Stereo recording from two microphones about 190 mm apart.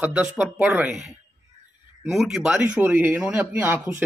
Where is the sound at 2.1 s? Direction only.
Centre (ahead or behind).